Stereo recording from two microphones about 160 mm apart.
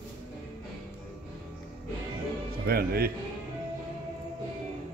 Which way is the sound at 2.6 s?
75° right (ahead or behind).